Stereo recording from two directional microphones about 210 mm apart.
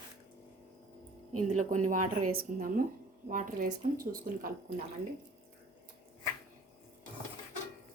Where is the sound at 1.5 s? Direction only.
35° right (ahead or behind).